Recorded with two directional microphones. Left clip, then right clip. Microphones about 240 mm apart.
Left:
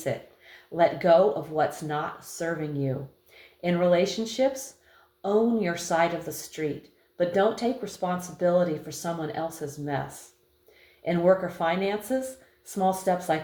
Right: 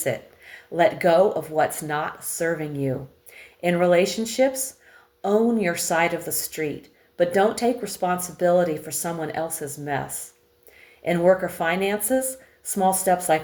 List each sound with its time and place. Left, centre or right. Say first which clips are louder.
0.8 s speech: right 2 dB; right
11.0 s speech: right 3 dB; right